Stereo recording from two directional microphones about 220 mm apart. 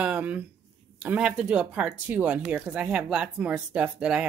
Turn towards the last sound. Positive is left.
turn(degrees=-5)  # may be behind; listen again after turning